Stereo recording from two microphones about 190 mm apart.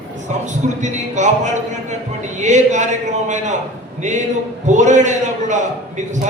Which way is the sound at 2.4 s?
40° right (ahead or behind).